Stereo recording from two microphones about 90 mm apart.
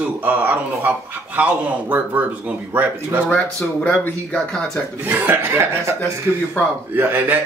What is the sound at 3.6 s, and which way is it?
Speech, 10° left (ahead or behind).